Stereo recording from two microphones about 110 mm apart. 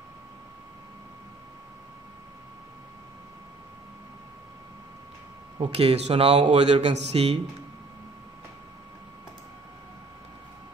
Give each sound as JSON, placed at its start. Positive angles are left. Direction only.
{"t": 5.6, "sound": "speech", "side_deg": -65}